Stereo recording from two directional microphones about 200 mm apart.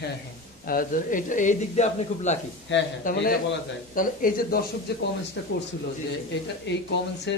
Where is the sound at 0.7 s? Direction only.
45° left (ahead or behind).